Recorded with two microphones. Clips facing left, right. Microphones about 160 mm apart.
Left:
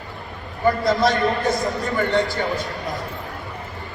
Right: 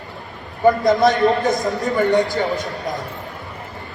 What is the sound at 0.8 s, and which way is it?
A man's voice, 20° right (ahead or behind).